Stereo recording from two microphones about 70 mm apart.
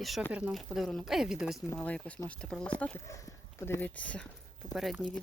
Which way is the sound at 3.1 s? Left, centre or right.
Left.